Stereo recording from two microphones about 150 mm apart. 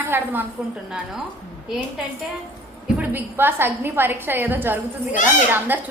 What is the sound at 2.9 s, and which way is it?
A woman's voice, 15° right (ahead or behind).